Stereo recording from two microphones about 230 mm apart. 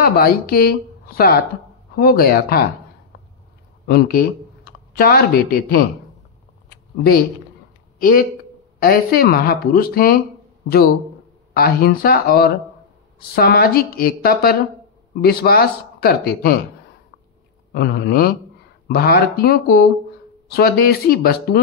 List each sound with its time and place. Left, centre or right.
0.0 s speech: left
3.8 s speech: left
7.0 s speech: left
11.5 s speech: left
17.7 s speech: left